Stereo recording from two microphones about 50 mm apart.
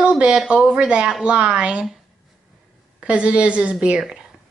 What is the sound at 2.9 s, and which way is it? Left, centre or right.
A woman's voice, right.